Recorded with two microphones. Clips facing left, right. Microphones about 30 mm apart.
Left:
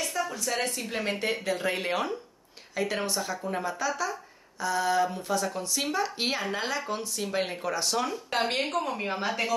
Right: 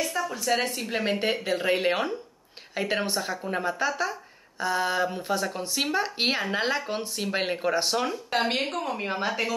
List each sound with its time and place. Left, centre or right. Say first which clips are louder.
0.3 s speech: right 4 dB; centre
8.3 s a woman's voice: right 2 dB; centre